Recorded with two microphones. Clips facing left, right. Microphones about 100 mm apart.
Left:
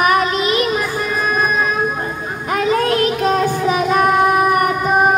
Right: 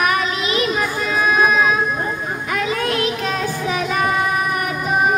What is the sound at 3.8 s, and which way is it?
Child singing, 50° left (ahead or behind).